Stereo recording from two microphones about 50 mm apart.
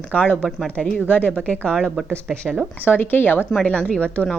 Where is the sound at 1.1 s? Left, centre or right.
Left.